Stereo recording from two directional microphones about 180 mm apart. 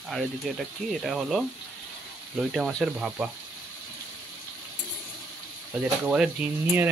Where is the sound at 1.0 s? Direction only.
Centre (ahead or behind).